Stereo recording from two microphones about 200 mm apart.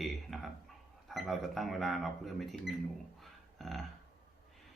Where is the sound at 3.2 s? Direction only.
Centre (ahead or behind).